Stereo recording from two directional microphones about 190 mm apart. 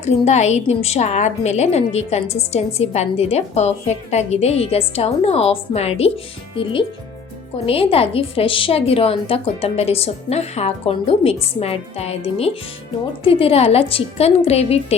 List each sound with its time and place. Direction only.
0.0 s a woman's voice: 35° left (ahead or behind)